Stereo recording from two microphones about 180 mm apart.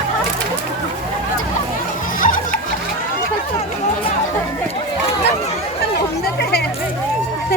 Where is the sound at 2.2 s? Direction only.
50° left (ahead or behind).